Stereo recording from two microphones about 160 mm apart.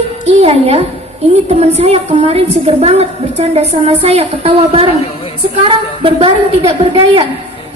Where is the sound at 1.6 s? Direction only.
40° right (ahead or behind).